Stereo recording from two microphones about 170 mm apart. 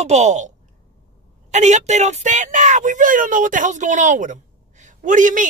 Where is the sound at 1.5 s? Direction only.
45° right (ahead or behind).